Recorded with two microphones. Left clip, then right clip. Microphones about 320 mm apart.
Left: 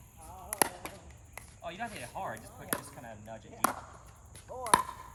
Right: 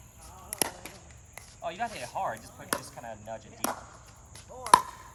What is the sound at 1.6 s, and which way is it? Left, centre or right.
Speech, centre.